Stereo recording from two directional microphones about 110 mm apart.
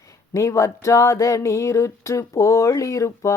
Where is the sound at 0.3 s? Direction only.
25° left (ahead or behind).